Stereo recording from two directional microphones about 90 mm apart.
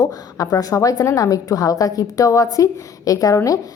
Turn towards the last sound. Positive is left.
turn(degrees=40)  # may be behind; listen again after turning